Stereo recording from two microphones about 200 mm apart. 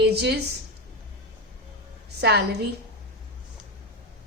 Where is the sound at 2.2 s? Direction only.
55° right (ahead or behind).